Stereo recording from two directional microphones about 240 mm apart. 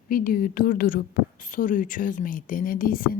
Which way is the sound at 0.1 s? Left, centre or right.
Left.